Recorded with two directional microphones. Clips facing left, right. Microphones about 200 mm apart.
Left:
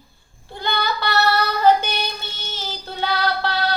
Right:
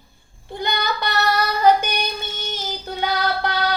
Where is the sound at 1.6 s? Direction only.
15° right (ahead or behind).